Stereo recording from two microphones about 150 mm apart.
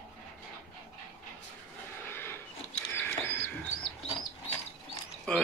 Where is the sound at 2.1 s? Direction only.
15° left (ahead or behind).